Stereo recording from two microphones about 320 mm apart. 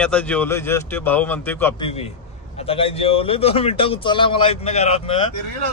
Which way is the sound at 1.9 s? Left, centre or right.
Centre.